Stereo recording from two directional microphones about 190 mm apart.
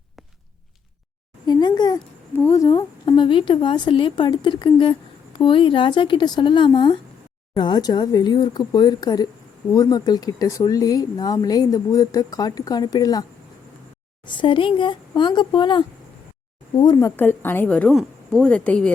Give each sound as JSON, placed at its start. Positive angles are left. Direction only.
{"t": 1.5, "sound": "a sound", "side_deg": 20}
{"t": 2.3, "sound": "a woman's voice", "side_deg": 15}
{"t": 14.3, "sound": "a woman's voice", "side_deg": 25}
{"t": 17.2, "sound": "a woman's voice", "side_deg": 10}